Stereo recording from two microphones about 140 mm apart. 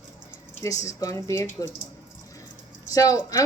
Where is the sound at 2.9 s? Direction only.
25° left (ahead or behind).